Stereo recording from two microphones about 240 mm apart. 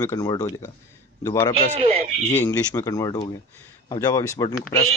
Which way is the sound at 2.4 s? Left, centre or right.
Centre.